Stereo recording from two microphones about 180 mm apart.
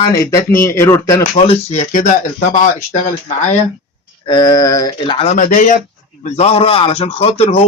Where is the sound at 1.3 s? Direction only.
35° left (ahead or behind).